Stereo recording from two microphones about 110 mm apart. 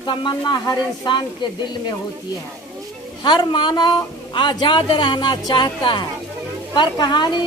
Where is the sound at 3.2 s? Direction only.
45° left (ahead or behind).